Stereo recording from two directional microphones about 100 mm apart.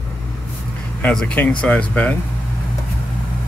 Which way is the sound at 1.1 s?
15° left (ahead or behind).